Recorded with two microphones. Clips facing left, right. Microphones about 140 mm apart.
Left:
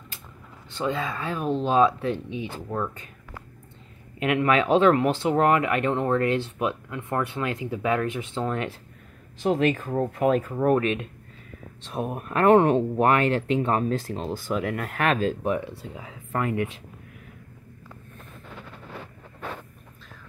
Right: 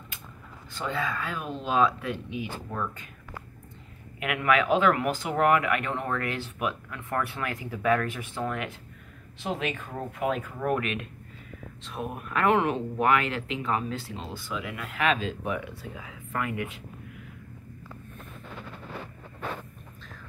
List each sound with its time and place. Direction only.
0.7 s speech: 25° left (ahead or behind)
4.2 s speech: 30° left (ahead or behind)
9.4 s speech: 40° left (ahead or behind)